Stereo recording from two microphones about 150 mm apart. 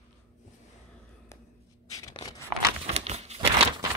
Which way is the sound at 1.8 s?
25° left (ahead or behind).